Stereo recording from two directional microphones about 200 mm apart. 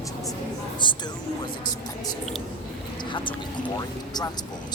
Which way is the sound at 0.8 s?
25° left (ahead or behind).